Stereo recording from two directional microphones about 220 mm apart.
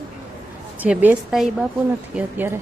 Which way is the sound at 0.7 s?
5° right (ahead or behind).